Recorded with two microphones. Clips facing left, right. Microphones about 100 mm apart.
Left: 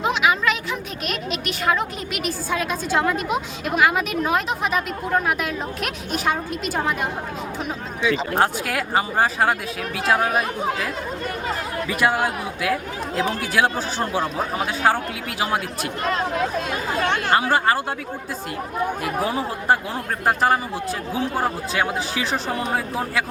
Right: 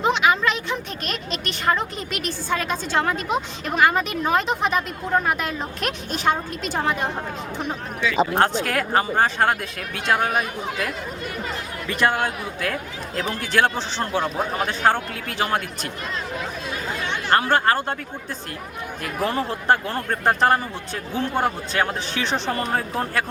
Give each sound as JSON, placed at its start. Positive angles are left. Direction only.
{"t": 0.0, "sound": "speech", "side_deg": 5}
{"t": 8.4, "sound": "speech", "side_deg": 5}
{"t": 11.9, "sound": "speech", "side_deg": 10}
{"t": 16.0, "sound": "speech", "side_deg": 65}
{"t": 16.9, "sound": "chatter", "side_deg": 50}
{"t": 17.3, "sound": "speech", "side_deg": 10}
{"t": 19.2, "sound": "speech", "side_deg": 5}